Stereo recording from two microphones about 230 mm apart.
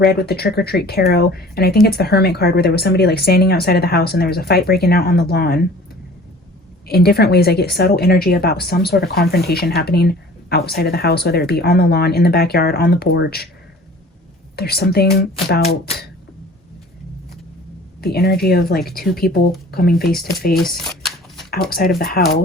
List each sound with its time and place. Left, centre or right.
0.0 s speech: left
6.8 s speech: left
14.5 s speech: left
18.0 s speech: left
20.7 s shuffling cards: centre
21.7 s speech: left